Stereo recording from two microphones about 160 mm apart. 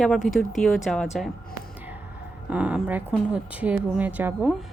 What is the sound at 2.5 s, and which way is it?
A woman's voice, 10° right (ahead or behind).